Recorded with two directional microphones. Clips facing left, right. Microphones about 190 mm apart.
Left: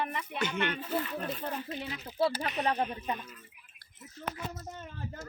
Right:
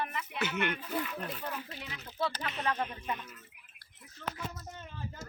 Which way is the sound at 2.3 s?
15° left (ahead or behind).